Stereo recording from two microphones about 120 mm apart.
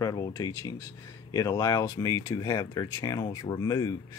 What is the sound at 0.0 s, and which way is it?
Speech, 30° left (ahead or behind).